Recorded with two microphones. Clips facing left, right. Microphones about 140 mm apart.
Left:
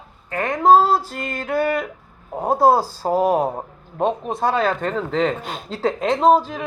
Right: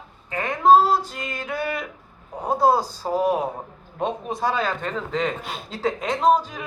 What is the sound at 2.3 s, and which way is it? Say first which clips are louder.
Speech: left 4 dB; 25° left (ahead or behind).